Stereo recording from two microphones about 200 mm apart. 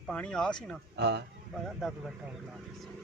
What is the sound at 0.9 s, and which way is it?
Speech, 60° right (ahead or behind).